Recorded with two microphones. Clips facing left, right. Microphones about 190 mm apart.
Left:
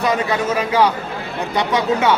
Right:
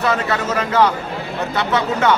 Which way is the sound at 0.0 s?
15° left (ahead or behind).